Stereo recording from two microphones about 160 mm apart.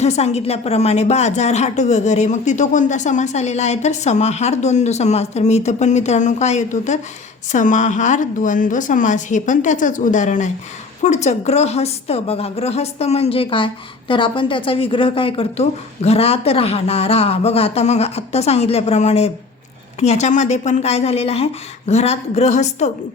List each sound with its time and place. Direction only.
0.0 s a woman's voice: 45° left (ahead or behind)